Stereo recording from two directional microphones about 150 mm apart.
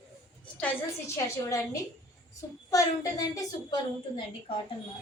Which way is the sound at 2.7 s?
20° left (ahead or behind).